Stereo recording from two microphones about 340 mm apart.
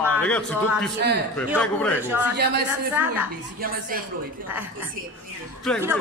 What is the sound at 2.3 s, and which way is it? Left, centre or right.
Speech, right.